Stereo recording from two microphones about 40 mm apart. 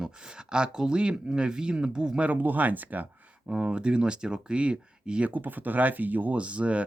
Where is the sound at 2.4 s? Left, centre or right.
Right.